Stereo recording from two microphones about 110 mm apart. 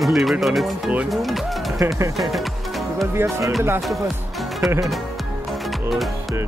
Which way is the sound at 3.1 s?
25° right (ahead or behind).